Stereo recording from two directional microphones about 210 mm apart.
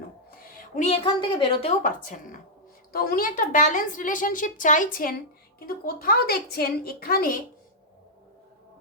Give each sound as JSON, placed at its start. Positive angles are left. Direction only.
{"t": 0.8, "sound": "a woman's voice", "side_deg": 25}
{"t": 1.8, "sound": "a woman's voice", "side_deg": 40}